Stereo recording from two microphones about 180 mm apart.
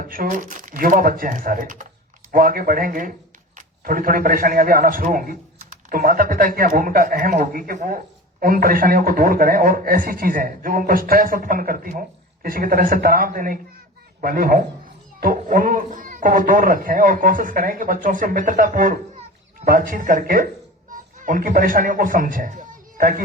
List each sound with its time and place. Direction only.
0.0 s a man's voice: 50° right (ahead or behind)